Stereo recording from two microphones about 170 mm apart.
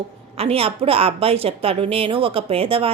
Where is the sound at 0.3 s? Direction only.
35° right (ahead or behind).